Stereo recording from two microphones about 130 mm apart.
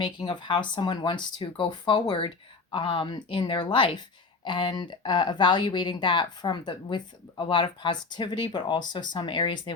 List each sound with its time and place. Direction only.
0.0 s speech: 35° left (ahead or behind)